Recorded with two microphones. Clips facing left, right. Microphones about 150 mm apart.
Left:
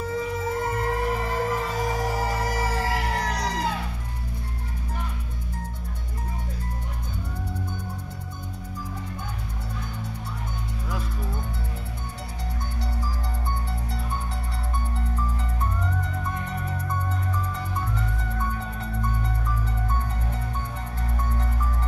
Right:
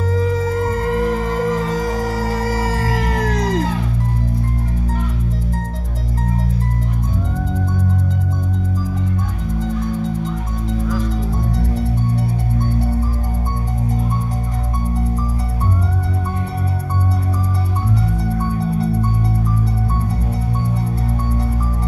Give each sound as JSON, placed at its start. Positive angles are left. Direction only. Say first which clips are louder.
{"t": 0.1, "sound": "music", "louder": "right 9 dB", "side_deg": -90}
{"t": 9.6, "sound": "music", "louder": "right 18 dB", "side_deg": -90}
{"t": 11.5, "sound": "music", "louder": "right 15 dB", "side_deg": -75}
{"t": 18.2, "sound": "music", "louder": "right 10 dB", "side_deg": -35}